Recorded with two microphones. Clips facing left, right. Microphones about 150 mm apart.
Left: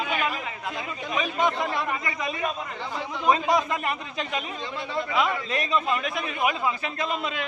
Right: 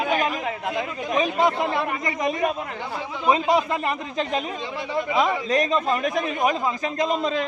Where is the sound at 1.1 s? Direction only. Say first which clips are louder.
Right 4 dB; 35° right (ahead or behind).